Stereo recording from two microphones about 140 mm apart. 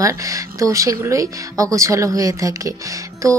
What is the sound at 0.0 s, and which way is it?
Speech, 25° right (ahead or behind).